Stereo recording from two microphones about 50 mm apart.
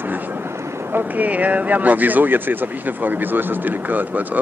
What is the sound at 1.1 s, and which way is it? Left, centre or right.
Speech, right.